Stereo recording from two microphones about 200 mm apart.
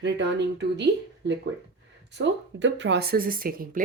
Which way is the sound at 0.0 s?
60° right (ahead or behind).